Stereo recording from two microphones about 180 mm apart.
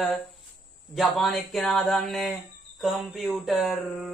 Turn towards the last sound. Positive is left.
turn(degrees=0)  # may be behind; listen again after turning